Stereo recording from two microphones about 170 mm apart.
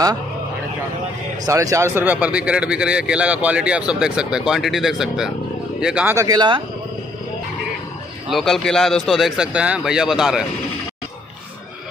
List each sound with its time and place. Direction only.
1.4 s speech: 20° right (ahead or behind)
8.3 s speech: centre (ahead or behind)